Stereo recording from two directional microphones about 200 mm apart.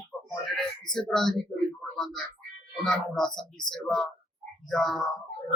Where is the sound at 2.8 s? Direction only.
Centre (ahead or behind).